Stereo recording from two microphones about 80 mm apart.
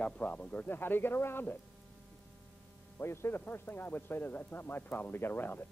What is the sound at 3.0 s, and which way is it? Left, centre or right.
Speech, left.